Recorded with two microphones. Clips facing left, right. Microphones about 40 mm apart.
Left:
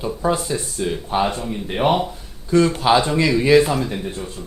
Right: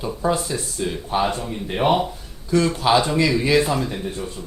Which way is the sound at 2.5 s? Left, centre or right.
Left.